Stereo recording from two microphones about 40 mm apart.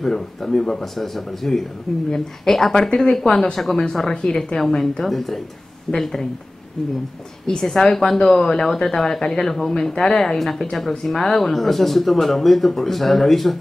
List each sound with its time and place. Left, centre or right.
0.0 s a woman's voice: centre
4.1 s a woman's voice: left
4.4 s a woman's voice: centre
7.4 s a woman's voice: centre